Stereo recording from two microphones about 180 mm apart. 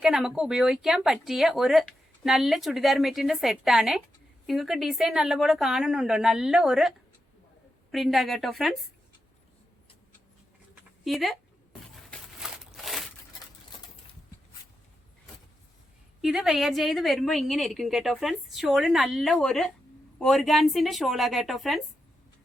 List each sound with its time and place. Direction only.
0.0 s speech: centre (ahead or behind)
11.0 s a sound: centre (ahead or behind)
16.2 s speech: centre (ahead or behind)